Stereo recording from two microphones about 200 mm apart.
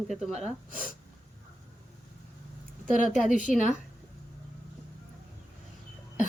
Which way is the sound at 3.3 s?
40° left (ahead or behind).